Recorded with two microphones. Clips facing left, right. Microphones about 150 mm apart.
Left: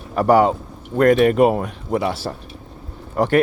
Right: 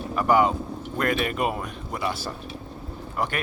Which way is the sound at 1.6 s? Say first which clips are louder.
Left 8 dB; 75° left (ahead or behind).